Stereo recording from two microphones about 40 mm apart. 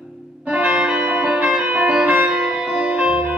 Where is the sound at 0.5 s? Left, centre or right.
Right.